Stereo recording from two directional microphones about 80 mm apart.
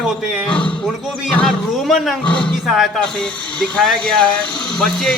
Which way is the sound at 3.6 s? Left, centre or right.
Centre.